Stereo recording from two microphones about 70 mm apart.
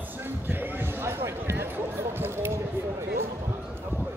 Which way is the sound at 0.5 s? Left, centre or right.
Right.